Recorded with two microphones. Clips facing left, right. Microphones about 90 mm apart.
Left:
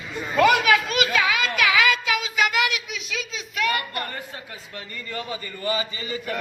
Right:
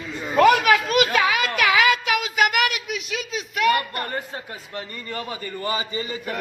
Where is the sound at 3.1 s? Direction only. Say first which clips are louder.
Even; 40° right (ahead or behind).